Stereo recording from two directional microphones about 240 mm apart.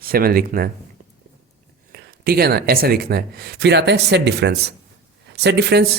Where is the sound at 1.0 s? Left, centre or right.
Right.